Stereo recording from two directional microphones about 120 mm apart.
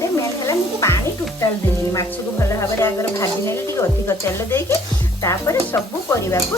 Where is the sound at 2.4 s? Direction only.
25° left (ahead or behind).